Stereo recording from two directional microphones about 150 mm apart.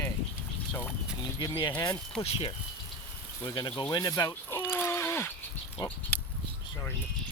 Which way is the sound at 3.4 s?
25° left (ahead or behind).